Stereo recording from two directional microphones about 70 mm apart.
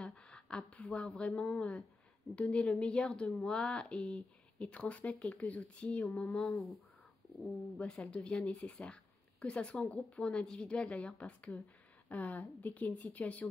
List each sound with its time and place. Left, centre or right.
0.0 s a sound: centre
1.6 s a woman's voice: centre
7.3 s speech: centre
7.8 s a woman's voice: centre